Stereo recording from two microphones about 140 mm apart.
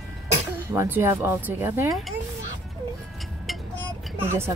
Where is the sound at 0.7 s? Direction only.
15° right (ahead or behind).